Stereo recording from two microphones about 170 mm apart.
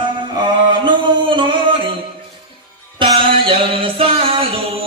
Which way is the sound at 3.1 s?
30° right (ahead or behind).